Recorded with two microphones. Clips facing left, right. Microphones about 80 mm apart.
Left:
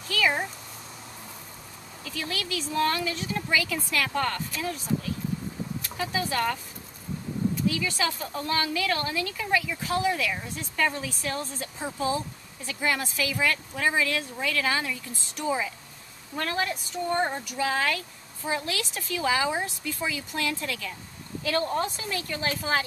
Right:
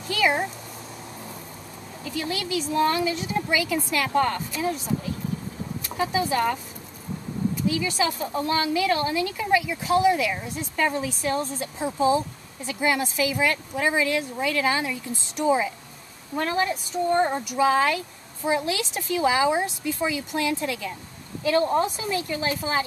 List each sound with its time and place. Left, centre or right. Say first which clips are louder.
0.1 s speech: right 3 dB; centre
2.0 s speech: right 4 dB; centre
7.6 s speech: right 6 dB; centre